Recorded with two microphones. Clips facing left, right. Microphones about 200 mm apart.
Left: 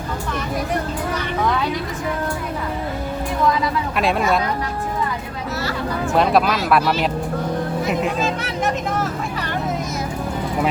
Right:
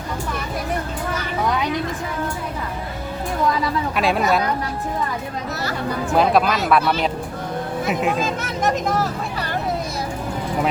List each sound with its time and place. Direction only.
3.9 s speech: centre (ahead or behind)
6.1 s speech: centre (ahead or behind)
8.0 s speech: 45° right (ahead or behind)